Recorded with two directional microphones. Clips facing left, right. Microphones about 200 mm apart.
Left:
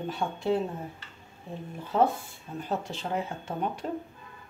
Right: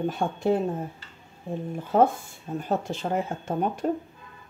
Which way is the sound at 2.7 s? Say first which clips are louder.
Right 4 dB; 45° right (ahead or behind).